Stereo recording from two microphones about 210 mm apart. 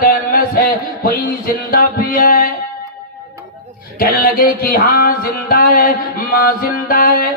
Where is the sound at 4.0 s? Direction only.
45° left (ahead or behind).